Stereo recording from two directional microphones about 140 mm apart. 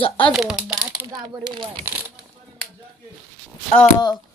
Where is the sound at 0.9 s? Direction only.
25° right (ahead or behind).